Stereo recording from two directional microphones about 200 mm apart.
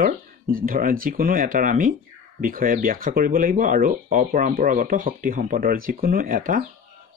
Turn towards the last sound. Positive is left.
turn(degrees=-45)  # may be behind; listen again after turning